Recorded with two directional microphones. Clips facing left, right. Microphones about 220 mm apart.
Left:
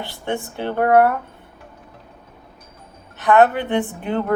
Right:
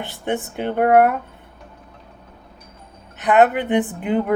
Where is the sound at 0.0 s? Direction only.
20° right (ahead or behind).